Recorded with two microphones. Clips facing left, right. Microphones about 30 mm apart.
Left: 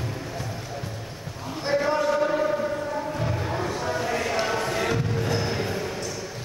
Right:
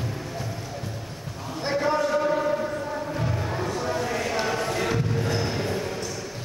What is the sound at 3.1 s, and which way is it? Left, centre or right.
Music, centre.